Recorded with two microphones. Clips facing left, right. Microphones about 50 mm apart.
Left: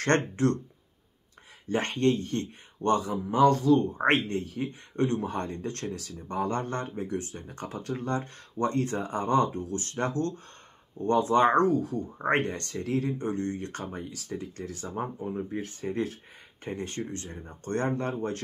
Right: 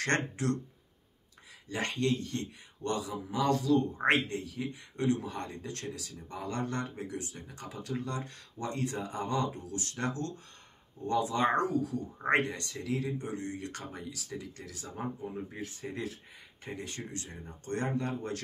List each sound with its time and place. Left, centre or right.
0.0 s speech: left
1.7 s speech: left
17.5 s speech: left